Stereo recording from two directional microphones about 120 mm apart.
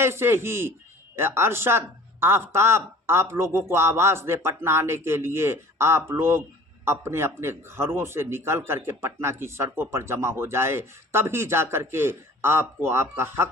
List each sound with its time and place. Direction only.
0.0 s speech: 20° right (ahead or behind)